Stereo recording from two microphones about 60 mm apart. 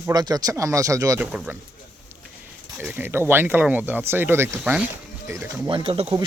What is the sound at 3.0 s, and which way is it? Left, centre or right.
Speech, right.